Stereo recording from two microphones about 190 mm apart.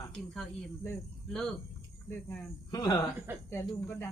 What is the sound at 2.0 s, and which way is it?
Speech, 10° left (ahead or behind).